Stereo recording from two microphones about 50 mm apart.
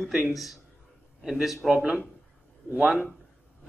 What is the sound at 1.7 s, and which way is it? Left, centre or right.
A man's voice, centre.